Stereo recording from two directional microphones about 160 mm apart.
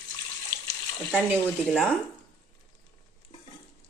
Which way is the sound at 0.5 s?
25° right (ahead or behind).